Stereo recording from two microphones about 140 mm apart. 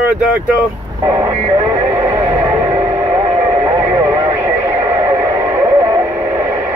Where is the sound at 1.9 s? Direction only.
20° right (ahead or behind).